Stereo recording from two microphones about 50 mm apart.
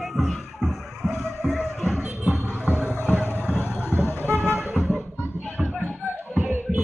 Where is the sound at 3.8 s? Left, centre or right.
Right.